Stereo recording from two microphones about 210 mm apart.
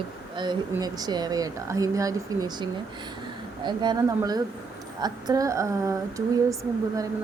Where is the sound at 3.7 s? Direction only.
20° right (ahead or behind).